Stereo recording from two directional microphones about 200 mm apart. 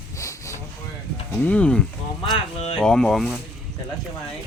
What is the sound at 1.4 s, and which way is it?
Speech, 5° left (ahead or behind).